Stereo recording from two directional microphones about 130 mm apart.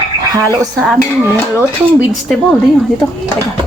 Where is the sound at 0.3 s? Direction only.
30° right (ahead or behind).